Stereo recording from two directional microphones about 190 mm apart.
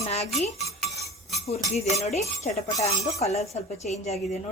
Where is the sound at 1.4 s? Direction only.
35° left (ahead or behind).